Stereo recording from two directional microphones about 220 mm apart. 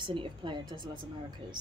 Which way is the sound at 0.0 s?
20° right (ahead or behind).